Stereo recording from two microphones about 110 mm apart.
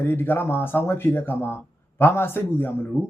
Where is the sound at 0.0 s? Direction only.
20° left (ahead or behind).